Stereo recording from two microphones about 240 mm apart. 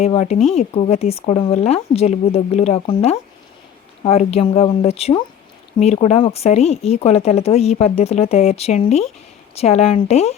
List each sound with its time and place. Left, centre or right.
0.0 s speech: left